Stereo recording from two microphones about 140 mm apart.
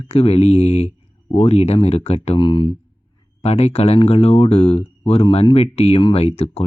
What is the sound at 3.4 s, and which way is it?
Speech, 50° left (ahead or behind).